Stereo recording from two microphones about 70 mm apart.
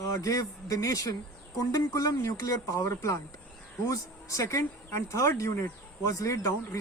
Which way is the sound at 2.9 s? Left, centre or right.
Left.